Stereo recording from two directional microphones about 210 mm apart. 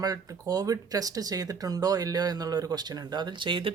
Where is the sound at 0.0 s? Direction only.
20° right (ahead or behind).